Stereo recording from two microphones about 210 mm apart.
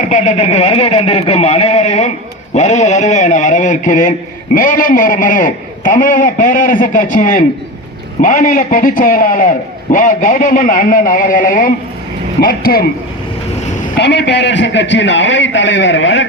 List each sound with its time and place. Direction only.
0.1 s a man's voice: 35° left (ahead or behind)
13.9 s a man's voice: 55° left (ahead or behind)